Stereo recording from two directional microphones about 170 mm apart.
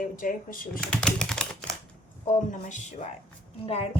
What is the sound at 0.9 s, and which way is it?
Typing, 5° left (ahead or behind).